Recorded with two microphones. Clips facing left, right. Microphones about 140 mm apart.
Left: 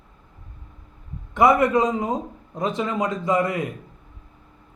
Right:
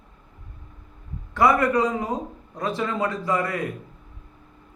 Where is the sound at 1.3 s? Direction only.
20° left (ahead or behind).